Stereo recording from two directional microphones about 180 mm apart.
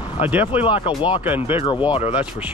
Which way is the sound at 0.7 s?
30° left (ahead or behind).